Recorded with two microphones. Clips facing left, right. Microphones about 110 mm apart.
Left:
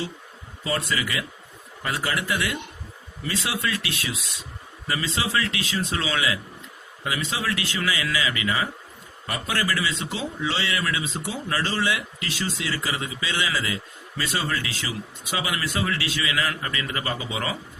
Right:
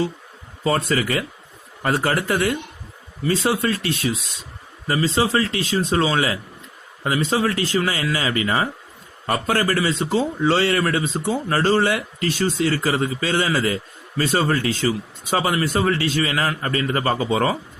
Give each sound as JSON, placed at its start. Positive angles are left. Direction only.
{"t": 1.8, "sound": "speech", "side_deg": -45}